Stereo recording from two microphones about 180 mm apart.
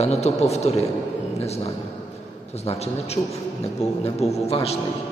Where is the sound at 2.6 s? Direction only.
35° left (ahead or behind).